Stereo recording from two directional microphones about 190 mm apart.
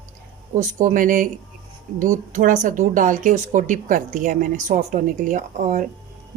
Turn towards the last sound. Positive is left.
turn(degrees=-45)  # may be behind; listen again after turning